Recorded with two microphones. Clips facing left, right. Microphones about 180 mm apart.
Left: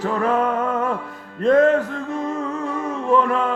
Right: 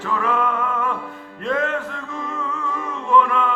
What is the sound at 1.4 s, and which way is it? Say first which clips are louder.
Music: left 8 dB; 40° left (ahead or behind).